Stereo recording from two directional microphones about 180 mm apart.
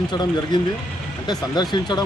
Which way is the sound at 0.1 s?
25° left (ahead or behind).